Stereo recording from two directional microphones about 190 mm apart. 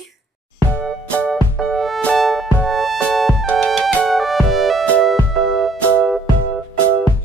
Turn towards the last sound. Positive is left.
turn(degrees=5)  # may be behind; listen again after turning